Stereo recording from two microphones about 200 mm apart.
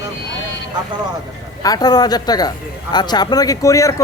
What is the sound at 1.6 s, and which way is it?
Speech, 20° left (ahead or behind).